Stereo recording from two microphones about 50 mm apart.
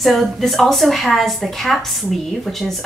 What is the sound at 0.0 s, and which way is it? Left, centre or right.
A woman's voice, centre.